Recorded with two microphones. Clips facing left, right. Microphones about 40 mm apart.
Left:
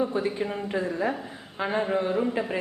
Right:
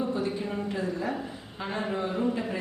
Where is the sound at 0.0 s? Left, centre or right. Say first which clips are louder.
Left 3 dB; left.